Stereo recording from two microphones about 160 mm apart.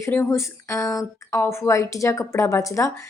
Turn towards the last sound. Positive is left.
turn(degrees=20)  # may be behind; listen again after turning